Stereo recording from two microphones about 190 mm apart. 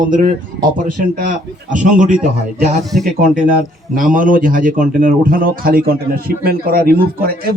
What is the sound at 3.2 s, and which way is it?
Speech, 45° right (ahead or behind).